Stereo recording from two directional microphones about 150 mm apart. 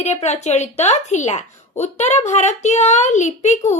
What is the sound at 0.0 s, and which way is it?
A woman's voice, 50° left (ahead or behind).